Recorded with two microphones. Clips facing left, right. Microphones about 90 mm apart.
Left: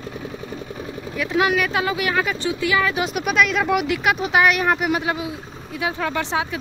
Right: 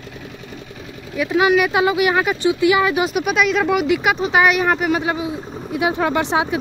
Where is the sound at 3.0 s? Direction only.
5° right (ahead or behind).